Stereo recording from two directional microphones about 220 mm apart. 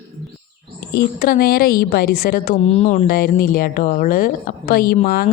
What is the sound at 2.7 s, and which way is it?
Speech, 30° left (ahead or behind).